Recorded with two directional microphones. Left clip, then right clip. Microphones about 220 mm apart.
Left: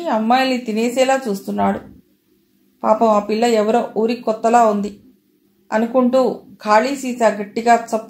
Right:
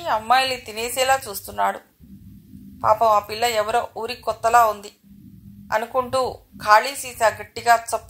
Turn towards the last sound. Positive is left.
turn(degrees=-30)  # may be behind; listen again after turning